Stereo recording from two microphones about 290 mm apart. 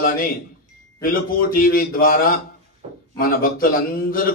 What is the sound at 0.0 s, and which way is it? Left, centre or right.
A man's voice, left.